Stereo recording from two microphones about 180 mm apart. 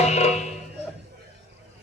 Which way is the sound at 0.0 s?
35° left (ahead or behind).